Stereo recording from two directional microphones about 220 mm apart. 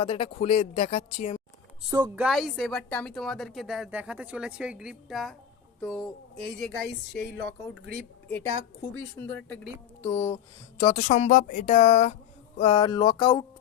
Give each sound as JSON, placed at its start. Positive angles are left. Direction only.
{"t": 0.0, "sound": "speech", "side_deg": 25}
{"t": 1.9, "sound": "speech", "side_deg": -15}
{"t": 2.2, "sound": "a woman's voice", "side_deg": 0}
{"t": 6.6, "sound": "a woman's voice", "side_deg": 0}
{"t": 11.1, "sound": "speech", "side_deg": 35}